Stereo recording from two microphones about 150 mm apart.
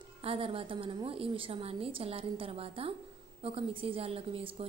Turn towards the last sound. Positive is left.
turn(degrees=-40)  # may be behind; listen again after turning